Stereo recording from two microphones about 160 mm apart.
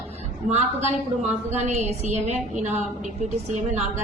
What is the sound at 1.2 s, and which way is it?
A woman's voice, 45° right (ahead or behind).